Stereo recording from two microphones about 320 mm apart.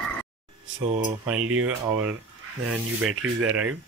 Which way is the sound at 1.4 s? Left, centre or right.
Right.